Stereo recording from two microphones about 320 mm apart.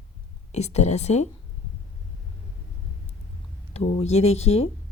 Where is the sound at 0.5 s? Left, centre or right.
Left.